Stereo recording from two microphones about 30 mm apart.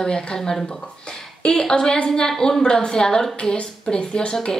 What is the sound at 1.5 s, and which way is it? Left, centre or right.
A woman's voice, left.